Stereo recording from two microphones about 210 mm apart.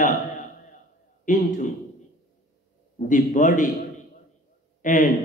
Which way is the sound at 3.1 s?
40° left (ahead or behind).